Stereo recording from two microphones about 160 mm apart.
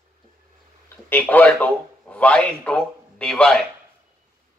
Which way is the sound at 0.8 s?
10° left (ahead or behind).